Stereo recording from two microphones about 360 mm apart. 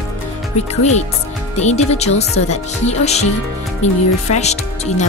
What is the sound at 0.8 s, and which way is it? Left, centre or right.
Speech, centre.